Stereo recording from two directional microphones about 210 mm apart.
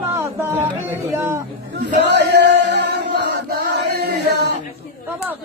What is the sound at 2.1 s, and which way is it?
Male singing, 55° right (ahead or behind).